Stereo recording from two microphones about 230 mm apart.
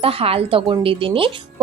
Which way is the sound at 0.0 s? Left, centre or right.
Right.